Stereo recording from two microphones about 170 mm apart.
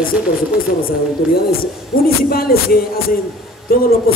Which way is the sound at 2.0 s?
60° left (ahead or behind).